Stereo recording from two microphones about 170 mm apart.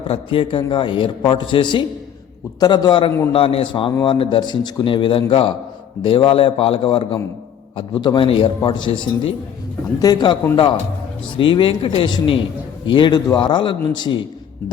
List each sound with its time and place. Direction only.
0.1 s a man's voice: 30° left (ahead or behind)
11.3 s a man's voice: 30° left (ahead or behind)